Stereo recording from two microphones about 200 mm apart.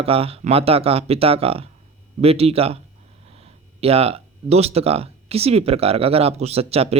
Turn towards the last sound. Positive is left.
turn(degrees=-30)  # may be behind; listen again after turning